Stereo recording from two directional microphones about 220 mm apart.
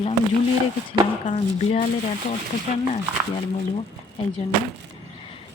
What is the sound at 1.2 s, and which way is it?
Speech, 25° left (ahead or behind).